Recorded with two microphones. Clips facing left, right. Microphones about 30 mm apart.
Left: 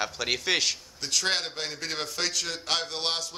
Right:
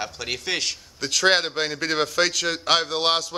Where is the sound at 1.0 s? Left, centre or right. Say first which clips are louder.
Right 9 dB; right.